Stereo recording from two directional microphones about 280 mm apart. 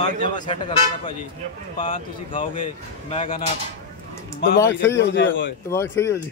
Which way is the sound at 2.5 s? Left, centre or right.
Centre.